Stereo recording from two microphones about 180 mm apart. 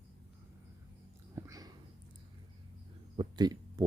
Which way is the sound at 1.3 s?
20° right (ahead or behind).